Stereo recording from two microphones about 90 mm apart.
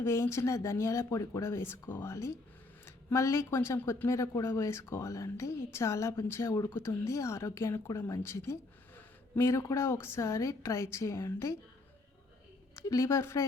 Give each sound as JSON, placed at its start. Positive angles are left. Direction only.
{"t": 0.0, "sound": "a woman's voice", "side_deg": 30}
{"t": 12.7, "sound": "a woman's voice", "side_deg": 35}